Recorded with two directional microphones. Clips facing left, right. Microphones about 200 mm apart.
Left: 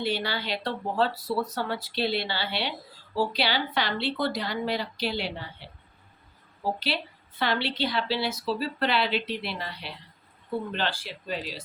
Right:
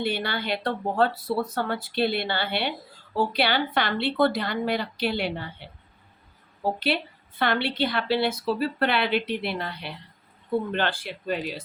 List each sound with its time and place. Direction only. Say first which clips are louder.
0.0 s a woman's voice: right 2 dB; 55° right (ahead or behind)
6.7 s a woman's voice: right 5 dB; 55° right (ahead or behind)